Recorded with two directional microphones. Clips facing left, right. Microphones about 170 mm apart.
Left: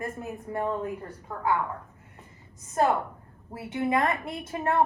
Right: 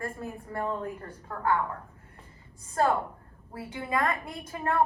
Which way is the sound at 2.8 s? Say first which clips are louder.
Left 1 dB; 20° left (ahead or behind).